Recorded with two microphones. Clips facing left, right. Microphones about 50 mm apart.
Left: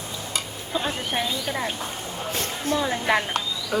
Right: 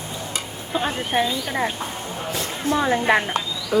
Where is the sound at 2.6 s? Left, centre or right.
Right.